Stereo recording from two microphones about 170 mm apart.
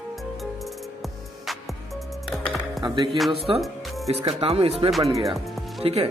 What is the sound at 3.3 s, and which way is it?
Speech, 35° right (ahead or behind).